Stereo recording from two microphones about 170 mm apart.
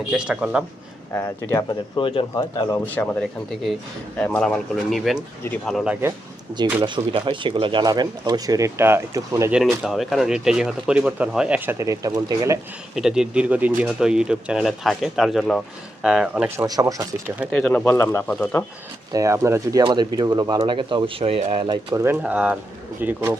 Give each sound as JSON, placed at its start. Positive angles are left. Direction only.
{"t": 0.1, "sound": "speech", "side_deg": -5}
{"t": 1.1, "sound": "speech", "side_deg": 15}
{"t": 2.0, "sound": "speech", "side_deg": 30}
{"t": 2.3, "sound": "speech", "side_deg": 20}
{"t": 2.8, "sound": "speech", "side_deg": 10}
{"t": 6.8, "sound": "speech", "side_deg": -30}
{"t": 9.6, "sound": "speech", "side_deg": -5}
{"t": 13.0, "sound": "speech", "side_deg": -5}
{"t": 16.6, "sound": "speech", "side_deg": -20}
{"t": 17.5, "sound": "speech", "side_deg": 5}
{"t": 19.1, "sound": "speech", "side_deg": -20}
{"t": 22.0, "sound": "speech", "side_deg": -10}